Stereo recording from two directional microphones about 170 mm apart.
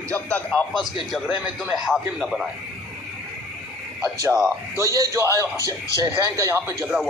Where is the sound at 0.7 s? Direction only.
Centre (ahead or behind).